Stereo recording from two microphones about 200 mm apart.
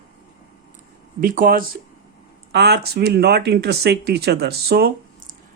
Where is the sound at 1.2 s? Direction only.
45° right (ahead or behind).